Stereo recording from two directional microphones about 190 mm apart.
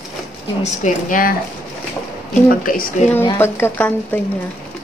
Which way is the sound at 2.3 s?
45° left (ahead or behind).